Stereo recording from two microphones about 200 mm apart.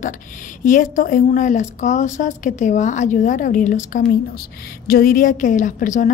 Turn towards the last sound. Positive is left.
turn(degrees=40)  # may be behind; listen again after turning